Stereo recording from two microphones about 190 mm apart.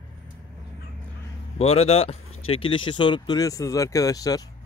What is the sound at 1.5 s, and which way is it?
Speech, 35° left (ahead or behind).